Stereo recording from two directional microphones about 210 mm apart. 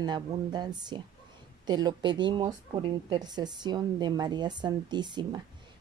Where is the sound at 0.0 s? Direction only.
20° right (ahead or behind).